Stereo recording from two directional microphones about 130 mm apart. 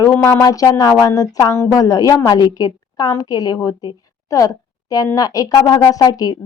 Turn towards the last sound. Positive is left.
turn(degrees=30)  # may be behind; listen again after turning